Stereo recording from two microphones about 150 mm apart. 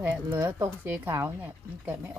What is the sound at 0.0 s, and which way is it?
Speech, 10° right (ahead or behind).